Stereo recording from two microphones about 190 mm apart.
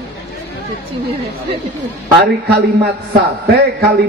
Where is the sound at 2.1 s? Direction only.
60° right (ahead or behind).